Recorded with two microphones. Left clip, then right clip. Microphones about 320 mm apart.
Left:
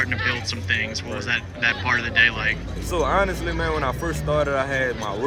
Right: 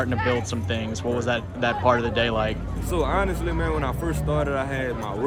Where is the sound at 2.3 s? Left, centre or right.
Centre.